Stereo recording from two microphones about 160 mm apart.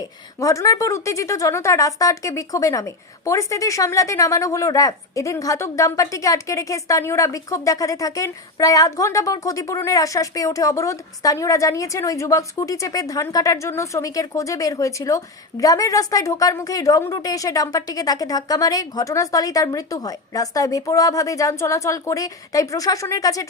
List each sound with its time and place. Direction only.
0.3 s speech: 20° left (ahead or behind)